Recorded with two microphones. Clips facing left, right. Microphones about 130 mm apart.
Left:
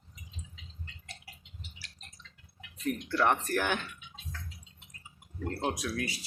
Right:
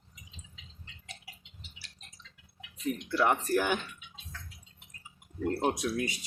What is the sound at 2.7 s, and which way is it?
Speech, 5° right (ahead or behind).